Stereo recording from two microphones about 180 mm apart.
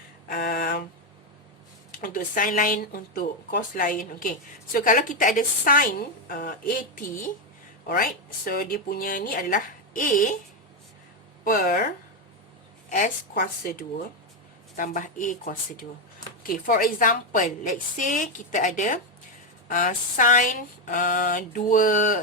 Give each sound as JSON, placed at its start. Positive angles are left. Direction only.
{"t": 0.3, "sound": "a sound", "side_deg": 60}
{"t": 2.0, "sound": "speech", "side_deg": 50}
{"t": 11.4, "sound": "speech", "side_deg": 50}
{"t": 12.9, "sound": "speech", "side_deg": 50}
{"t": 14.8, "sound": "speech", "side_deg": 45}